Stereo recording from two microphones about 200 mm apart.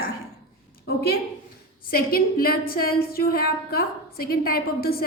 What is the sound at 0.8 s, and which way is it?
A woman's voice, 50° left (ahead or behind).